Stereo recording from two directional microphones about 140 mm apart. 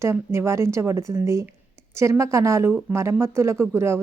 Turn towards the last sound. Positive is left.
turn(degrees=-20)  # may be behind; listen again after turning